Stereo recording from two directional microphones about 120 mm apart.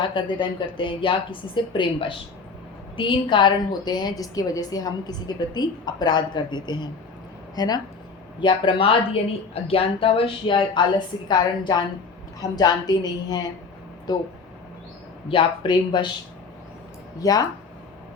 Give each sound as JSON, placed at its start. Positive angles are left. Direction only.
{"t": 0.0, "sound": "a woman's voice", "side_deg": 40}
{"t": 15.3, "sound": "a woman's voice", "side_deg": 45}
{"t": 17.2, "sound": "a woman's voice", "side_deg": 30}